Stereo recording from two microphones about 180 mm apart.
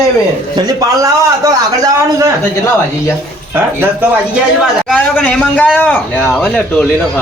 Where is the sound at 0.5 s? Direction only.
20° right (ahead or behind).